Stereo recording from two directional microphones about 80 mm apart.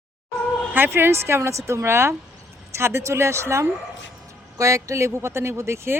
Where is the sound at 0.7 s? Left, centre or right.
Right.